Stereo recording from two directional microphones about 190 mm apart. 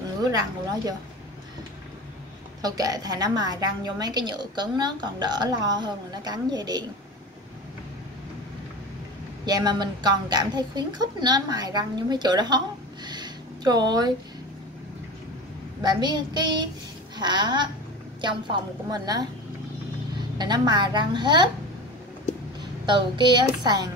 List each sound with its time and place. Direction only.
0.2 s a woman's voice: 20° right (ahead or behind)
2.6 s a woman's voice: 20° right (ahead or behind)
9.5 s a woman's voice: 20° right (ahead or behind)
15.8 s a woman's voice: 20° right (ahead or behind)
20.3 s a woman's voice: 20° right (ahead or behind)
22.8 s a woman's voice: 25° right (ahead or behind)